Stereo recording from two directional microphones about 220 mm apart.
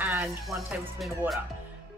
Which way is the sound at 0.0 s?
5° right (ahead or behind).